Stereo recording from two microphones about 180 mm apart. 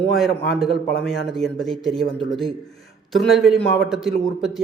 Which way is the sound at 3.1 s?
Centre (ahead or behind).